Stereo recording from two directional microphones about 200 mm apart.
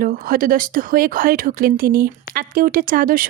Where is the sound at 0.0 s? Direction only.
45° right (ahead or behind).